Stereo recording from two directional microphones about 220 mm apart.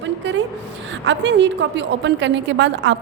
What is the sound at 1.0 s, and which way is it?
A woman's voice, 55° right (ahead or behind).